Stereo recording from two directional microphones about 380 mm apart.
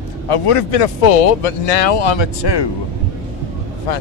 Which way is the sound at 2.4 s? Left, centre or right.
Left.